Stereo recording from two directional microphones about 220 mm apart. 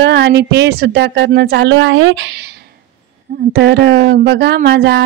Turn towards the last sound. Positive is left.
turn(degrees=-50)  # may be behind; listen again after turning